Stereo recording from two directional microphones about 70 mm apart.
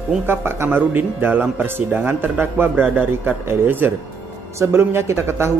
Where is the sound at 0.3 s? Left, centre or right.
Right.